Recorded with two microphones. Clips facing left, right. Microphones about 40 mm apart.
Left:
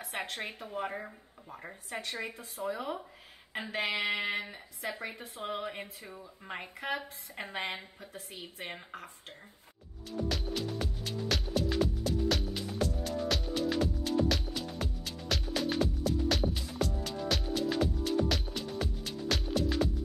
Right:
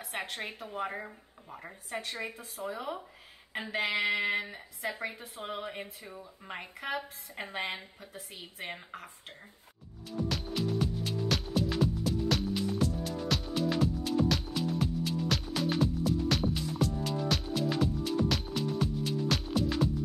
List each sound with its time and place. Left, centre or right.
0.0 s a woman's voice: centre
10.1 s music: centre